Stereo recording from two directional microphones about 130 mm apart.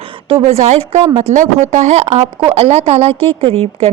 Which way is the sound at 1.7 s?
65° right (ahead or behind).